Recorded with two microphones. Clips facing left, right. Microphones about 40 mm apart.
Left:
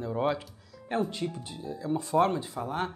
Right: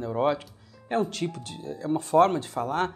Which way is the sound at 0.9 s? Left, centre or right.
Right.